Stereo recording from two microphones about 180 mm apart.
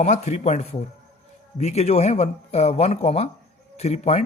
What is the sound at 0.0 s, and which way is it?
A man's voice, 40° left (ahead or behind).